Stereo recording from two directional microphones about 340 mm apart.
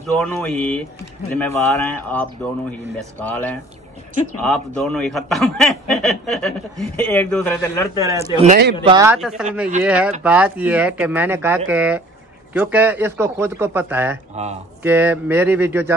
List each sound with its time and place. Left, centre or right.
0.0 s a man's voice: centre
8.4 s a man's voice: right
8.8 s a man's voice: centre
14.3 s speech: centre
14.8 s a man's voice: centre